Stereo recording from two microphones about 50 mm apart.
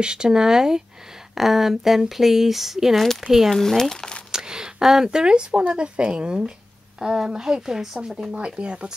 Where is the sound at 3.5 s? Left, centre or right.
Centre.